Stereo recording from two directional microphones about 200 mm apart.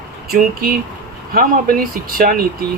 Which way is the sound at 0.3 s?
45° right (ahead or behind).